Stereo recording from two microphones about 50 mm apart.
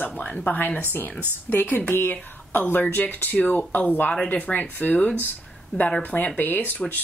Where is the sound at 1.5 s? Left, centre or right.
Left.